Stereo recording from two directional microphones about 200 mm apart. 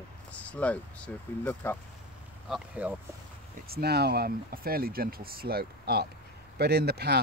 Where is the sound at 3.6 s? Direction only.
50° right (ahead or behind).